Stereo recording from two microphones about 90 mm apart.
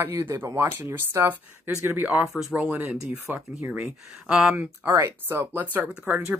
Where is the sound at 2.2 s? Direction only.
Centre (ahead or behind).